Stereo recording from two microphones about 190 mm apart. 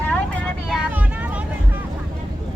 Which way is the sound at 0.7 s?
10° right (ahead or behind).